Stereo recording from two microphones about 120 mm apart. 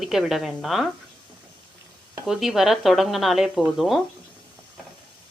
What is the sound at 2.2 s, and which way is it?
Speech, 5° right (ahead or behind).